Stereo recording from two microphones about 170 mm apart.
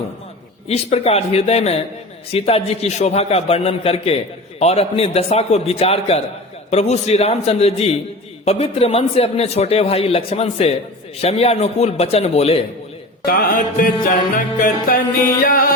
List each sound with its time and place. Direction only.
0.7 s speech: 35° left (ahead or behind)
13.2 s music: 55° left (ahead or behind)